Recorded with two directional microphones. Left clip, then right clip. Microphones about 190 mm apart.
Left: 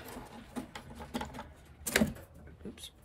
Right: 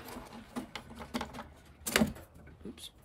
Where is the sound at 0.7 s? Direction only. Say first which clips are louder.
Right 2 dB; 15° right (ahead or behind).